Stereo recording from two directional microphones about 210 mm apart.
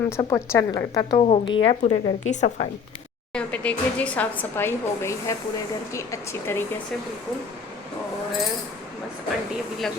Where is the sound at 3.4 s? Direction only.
5° left (ahead or behind).